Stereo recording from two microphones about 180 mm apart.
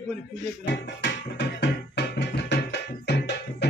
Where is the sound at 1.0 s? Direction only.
75° left (ahead or behind).